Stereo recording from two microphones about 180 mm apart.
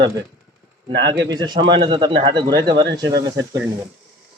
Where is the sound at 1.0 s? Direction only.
25° right (ahead or behind).